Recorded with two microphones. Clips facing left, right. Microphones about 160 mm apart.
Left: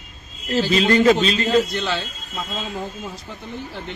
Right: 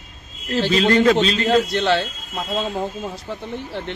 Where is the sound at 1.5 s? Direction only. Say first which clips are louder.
Right 2 dB; 70° right (ahead or behind).